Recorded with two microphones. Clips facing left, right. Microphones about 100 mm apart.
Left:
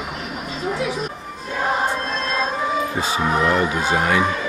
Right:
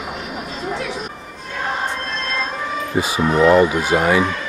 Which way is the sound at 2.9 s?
5° right (ahead or behind).